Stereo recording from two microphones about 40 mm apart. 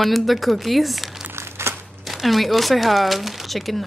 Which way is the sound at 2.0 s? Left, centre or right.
Centre.